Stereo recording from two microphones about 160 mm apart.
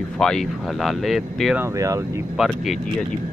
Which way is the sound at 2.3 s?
Centre (ahead or behind).